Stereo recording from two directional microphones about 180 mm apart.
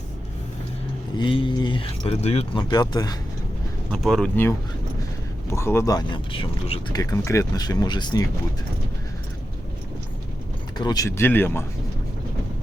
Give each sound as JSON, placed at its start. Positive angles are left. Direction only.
{"t": 1.1, "sound": "speech", "side_deg": 25}
{"t": 2.6, "sound": "speech", "side_deg": 20}
{"t": 3.9, "sound": "speech", "side_deg": 5}
{"t": 10.8, "sound": "speech", "side_deg": 20}